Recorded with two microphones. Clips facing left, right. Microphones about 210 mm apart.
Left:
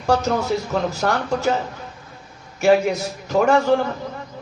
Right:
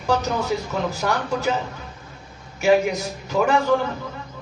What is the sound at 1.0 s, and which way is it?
Speech, 40° left (ahead or behind).